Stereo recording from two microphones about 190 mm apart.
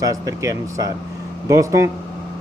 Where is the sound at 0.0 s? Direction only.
15° right (ahead or behind).